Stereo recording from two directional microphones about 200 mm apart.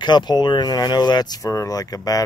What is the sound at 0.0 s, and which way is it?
Speech, 20° left (ahead or behind).